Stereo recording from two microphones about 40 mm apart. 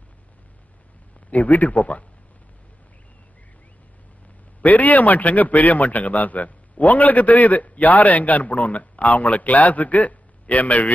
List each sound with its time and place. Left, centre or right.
1.3 s a man's voice: left
4.6 s a man's voice: left